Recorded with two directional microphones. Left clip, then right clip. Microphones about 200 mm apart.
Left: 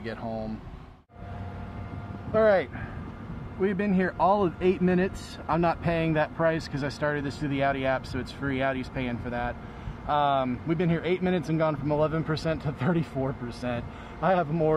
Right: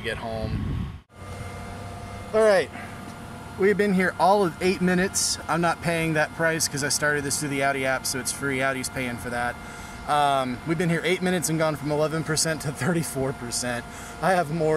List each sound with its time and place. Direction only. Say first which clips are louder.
0.0 s speech: right 4 dB; 15° left (ahead or behind)
2.3 s speech: right 3 dB; 5° right (ahead or behind)